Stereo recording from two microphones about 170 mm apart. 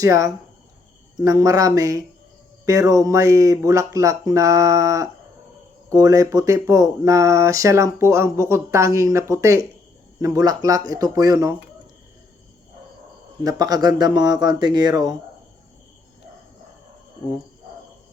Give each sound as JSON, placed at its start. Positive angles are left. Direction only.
{"t": 0.0, "sound": "speech", "side_deg": -20}
{"t": 13.4, "sound": "speech", "side_deg": -20}